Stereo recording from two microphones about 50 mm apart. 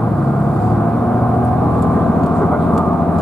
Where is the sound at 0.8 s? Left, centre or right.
Centre.